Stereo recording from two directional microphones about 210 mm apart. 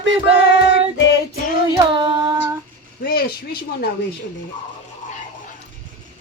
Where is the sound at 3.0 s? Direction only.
45° left (ahead or behind).